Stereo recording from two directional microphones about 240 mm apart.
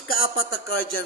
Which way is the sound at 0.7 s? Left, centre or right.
Left.